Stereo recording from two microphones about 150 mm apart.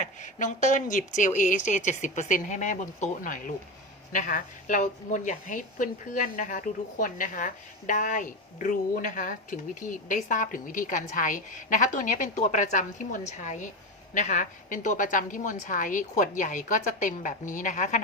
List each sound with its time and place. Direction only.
0.0 s a woman's voice: 55° left (ahead or behind)